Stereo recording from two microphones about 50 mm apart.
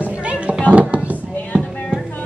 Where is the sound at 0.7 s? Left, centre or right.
Right.